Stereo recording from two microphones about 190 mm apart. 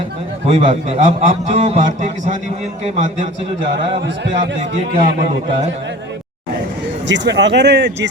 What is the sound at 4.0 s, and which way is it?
Speech, 65° right (ahead or behind).